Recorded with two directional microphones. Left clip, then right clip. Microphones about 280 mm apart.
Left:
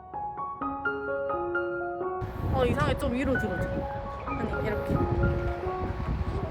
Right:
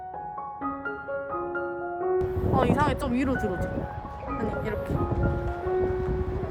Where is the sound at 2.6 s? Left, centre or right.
Centre.